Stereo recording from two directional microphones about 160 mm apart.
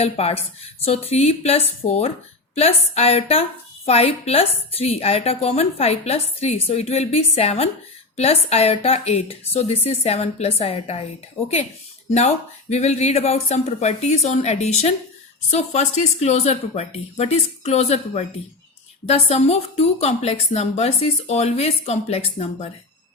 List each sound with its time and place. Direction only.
0.0 s a woman's voice: 40° left (ahead or behind)
12.1 s a woman's voice: 45° left (ahead or behind)